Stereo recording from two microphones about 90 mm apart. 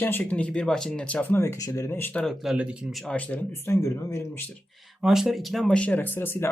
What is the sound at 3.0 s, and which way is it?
Speech, 15° left (ahead or behind).